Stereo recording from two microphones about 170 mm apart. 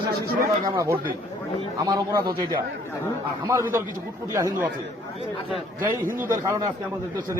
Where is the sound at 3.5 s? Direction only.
15° right (ahead or behind).